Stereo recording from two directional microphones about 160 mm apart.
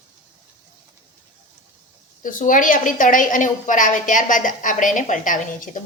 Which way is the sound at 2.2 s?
55° left (ahead or behind).